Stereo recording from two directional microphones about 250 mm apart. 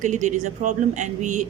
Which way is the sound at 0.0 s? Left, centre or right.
Right.